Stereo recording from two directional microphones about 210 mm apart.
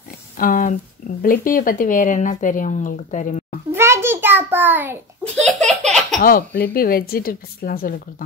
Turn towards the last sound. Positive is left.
turn(degrees=45)  # may be behind; listen again after turning